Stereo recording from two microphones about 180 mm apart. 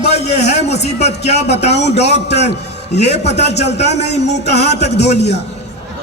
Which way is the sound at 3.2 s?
70° left (ahead or behind).